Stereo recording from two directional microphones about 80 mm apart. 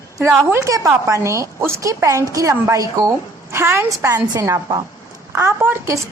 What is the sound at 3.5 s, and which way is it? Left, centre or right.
Speech, right.